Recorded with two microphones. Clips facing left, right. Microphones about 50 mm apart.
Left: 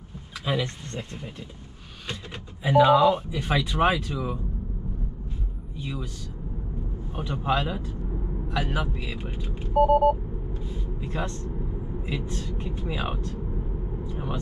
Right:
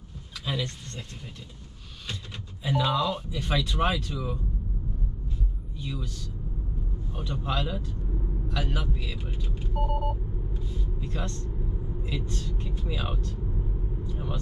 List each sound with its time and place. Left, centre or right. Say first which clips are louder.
0.5 s speech: left 5 dB; left
2.6 s speech: left 9 dB; centre
5.8 s a man's voice: left 2 dB; centre
7.1 s speech: left 6 dB; left
10.6 s vehicle: left 2 dB; left
12.1 s speech: left 3 dB; centre
14.0 s vehicle: left 3 dB; centre